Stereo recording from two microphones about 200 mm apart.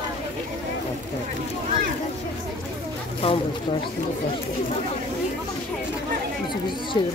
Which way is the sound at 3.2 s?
30° left (ahead or behind).